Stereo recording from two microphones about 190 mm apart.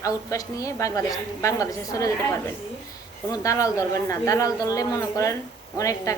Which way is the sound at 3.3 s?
15° left (ahead or behind).